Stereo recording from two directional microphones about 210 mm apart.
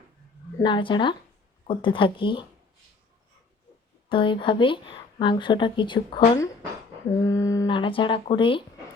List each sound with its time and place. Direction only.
0.6 s a woman's voice: 20° left (ahead or behind)
4.1 s a woman's voice: 25° left (ahead or behind)